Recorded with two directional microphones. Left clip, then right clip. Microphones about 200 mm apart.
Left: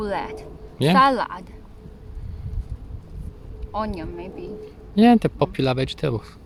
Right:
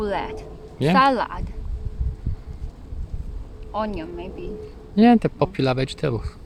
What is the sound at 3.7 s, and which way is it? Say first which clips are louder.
A woman's voice: right 1 dB; 5° left (ahead or behind).